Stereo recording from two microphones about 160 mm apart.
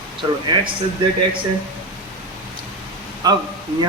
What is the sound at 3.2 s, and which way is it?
Speech, 25° right (ahead or behind).